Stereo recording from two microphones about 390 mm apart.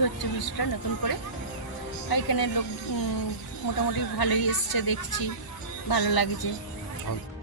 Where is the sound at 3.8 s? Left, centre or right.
Left.